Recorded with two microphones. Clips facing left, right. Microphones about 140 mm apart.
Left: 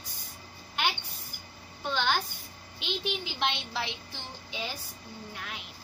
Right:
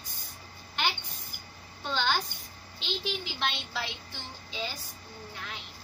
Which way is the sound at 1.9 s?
10° left (ahead or behind).